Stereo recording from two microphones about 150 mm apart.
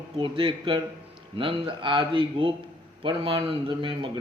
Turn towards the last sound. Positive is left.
turn(degrees=-35)  # may be behind; listen again after turning